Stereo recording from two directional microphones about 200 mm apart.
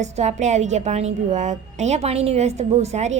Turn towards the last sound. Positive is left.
turn(degrees=-35)  # may be behind; listen again after turning